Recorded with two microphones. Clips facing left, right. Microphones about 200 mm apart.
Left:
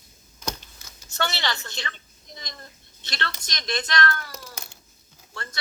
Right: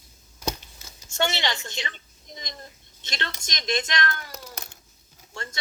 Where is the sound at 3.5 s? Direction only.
20° right (ahead or behind).